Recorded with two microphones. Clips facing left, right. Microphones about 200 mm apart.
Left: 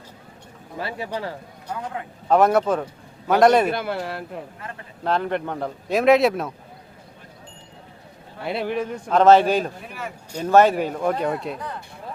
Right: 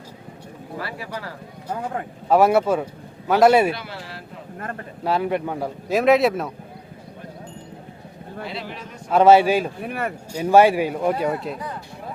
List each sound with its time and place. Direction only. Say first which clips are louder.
0.8 s speech: left 4 dB; 25° left (ahead or behind)
2.3 s a man's voice: right 1 dB; 10° right (ahead or behind)
3.7 s a man's voice: left 4 dB; 55° left (ahead or behind)
5.0 s a man's voice: right 1 dB; 5° right (ahead or behind)
8.4 s a man's voice: left 11 dB; 55° left (ahead or behind)
9.0 s speech: right 1 dB; 10° right (ahead or behind)
9.8 s speech: right 7 dB; 60° right (ahead or behind)
10.3 s speech: right 1 dB; 10° right (ahead or behind)